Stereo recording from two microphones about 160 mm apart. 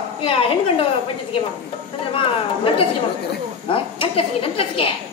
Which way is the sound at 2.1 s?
35° left (ahead or behind).